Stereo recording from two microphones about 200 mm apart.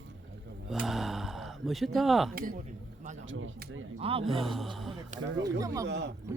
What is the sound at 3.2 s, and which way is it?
Speech, 80° right.